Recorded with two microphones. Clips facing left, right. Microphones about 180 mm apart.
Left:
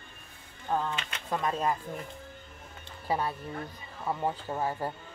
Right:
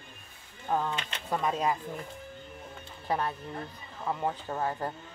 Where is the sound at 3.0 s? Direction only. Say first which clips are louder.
Even; 10° left (ahead or behind).